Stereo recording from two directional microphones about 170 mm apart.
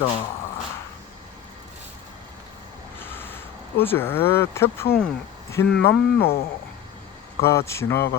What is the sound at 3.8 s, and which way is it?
Speech, 15° left (ahead or behind).